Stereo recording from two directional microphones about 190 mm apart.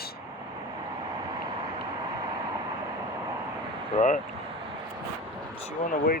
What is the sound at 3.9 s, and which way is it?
Speech, 40° left (ahead or behind).